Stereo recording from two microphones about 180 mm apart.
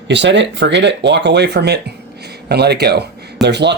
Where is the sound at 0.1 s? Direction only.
80° right.